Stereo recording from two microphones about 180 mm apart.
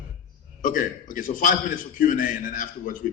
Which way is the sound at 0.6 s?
45° left (ahead or behind).